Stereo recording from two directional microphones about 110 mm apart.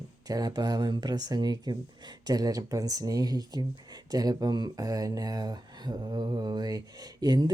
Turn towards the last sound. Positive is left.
turn(degrees=-40)  # may be behind; listen again after turning